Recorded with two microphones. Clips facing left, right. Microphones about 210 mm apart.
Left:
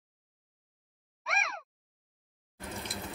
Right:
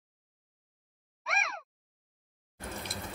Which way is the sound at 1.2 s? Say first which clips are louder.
Even; centre (ahead or behind).